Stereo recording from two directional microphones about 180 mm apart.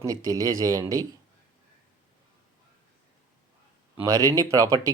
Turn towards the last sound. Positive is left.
turn(degrees=-20)  # may be behind; listen again after turning